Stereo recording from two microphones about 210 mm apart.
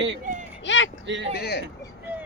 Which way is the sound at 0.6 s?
60° left (ahead or behind).